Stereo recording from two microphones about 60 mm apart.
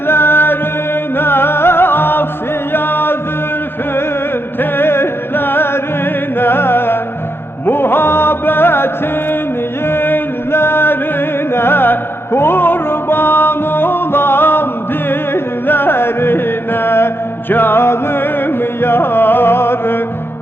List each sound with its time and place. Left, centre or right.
0.1 s music: left
4.6 s music: left
9.8 s a sound: left
11.5 s music: left